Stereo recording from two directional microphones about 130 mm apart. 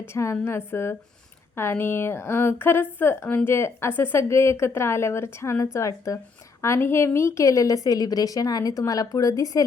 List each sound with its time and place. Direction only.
0.1 s a woman's voice: 20° left (ahead or behind)